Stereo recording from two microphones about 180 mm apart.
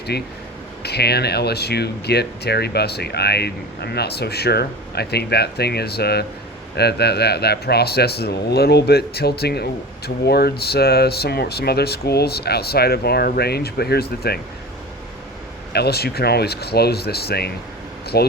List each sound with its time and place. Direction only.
0.1 s speech: 65° left (ahead or behind)
15.7 s speech: 60° left (ahead or behind)